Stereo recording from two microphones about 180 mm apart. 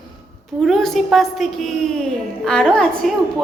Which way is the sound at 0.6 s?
Centre (ahead or behind).